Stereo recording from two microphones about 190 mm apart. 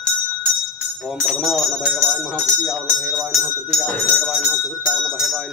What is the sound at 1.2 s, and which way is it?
Speech, centre (ahead or behind).